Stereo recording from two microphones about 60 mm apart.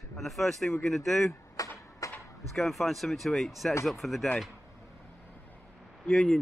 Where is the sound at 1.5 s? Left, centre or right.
Left.